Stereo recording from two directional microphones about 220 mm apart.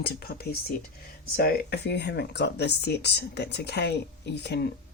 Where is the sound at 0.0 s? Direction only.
45° left (ahead or behind).